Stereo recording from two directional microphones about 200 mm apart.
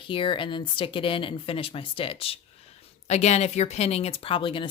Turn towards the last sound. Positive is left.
turn(degrees=25)  # may be behind; listen again after turning